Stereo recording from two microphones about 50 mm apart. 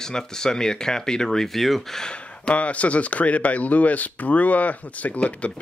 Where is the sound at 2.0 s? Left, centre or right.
Left.